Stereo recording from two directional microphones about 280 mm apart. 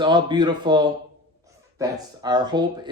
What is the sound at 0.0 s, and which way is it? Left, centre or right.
Speech, centre.